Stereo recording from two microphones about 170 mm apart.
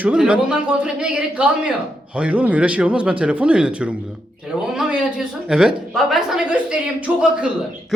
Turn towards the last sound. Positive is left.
turn(degrees=-5)  # may be behind; listen again after turning